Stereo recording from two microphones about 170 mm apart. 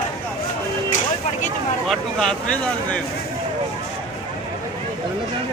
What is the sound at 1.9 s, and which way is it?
Speech, 5° left (ahead or behind).